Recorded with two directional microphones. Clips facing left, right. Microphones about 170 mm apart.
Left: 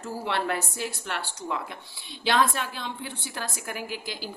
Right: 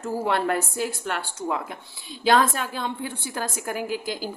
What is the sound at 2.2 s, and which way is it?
A woman's voice, 45° right (ahead or behind).